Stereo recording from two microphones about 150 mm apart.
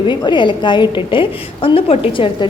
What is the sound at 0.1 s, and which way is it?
A woman's voice, 30° left (ahead or behind).